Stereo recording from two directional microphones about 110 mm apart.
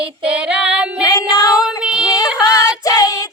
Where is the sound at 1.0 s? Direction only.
30° left (ahead or behind).